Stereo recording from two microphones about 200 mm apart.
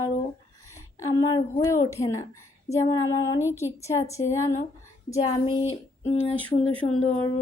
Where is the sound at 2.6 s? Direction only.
20° left (ahead or behind).